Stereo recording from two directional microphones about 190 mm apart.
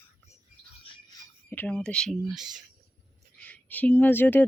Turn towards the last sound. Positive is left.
turn(degrees=10)  # may be behind; listen again after turning